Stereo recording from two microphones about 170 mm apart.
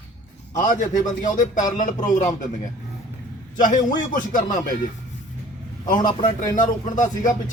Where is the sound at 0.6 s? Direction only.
50° left (ahead or behind).